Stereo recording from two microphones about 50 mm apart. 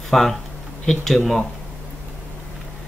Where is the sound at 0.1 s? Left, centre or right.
Centre.